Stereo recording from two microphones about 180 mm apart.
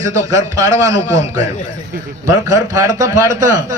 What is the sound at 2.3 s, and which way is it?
A man's voice, 15° right (ahead or behind).